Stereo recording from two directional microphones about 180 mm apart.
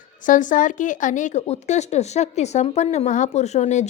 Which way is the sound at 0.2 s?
45° left (ahead or behind).